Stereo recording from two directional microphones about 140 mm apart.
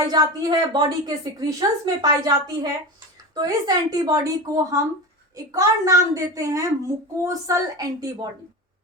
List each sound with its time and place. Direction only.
0.0 s a child's voice: 30° right (ahead or behind)